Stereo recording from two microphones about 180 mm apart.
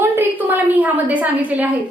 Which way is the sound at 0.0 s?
10° right (ahead or behind).